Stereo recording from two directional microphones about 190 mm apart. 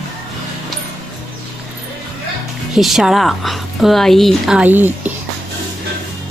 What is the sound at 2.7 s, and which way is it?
A woman's voice, centre (ahead or behind).